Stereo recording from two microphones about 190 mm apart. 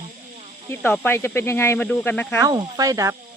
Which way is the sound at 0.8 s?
10° left (ahead or behind).